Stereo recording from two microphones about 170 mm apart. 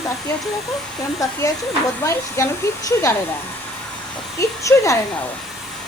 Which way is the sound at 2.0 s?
15° left (ahead or behind).